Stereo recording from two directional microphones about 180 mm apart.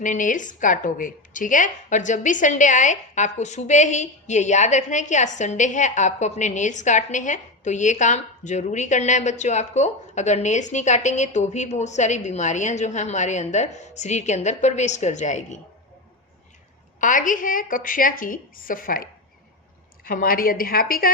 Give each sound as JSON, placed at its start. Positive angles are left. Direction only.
{"t": 0.0, "sound": "a woman's voice", "side_deg": 45}
{"t": 17.0, "sound": "a woman's voice", "side_deg": 45}
{"t": 20.1, "sound": "a woman's voice", "side_deg": 55}